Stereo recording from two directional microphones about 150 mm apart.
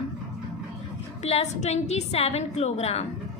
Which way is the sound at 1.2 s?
45° left (ahead or behind).